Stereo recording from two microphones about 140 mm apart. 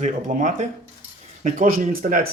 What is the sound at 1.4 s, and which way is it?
Speech, 75° right (ahead or behind).